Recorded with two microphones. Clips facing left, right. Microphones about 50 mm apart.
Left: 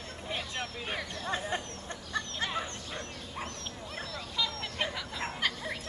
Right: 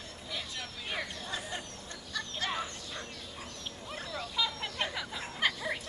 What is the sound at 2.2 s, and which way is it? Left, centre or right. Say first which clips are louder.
Fowl: left 3 dB; left.